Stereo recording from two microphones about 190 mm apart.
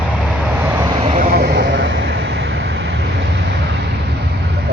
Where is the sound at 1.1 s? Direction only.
50° right (ahead or behind).